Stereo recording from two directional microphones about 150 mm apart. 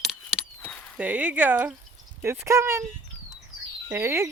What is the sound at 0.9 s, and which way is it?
Speech, 10° right (ahead or behind).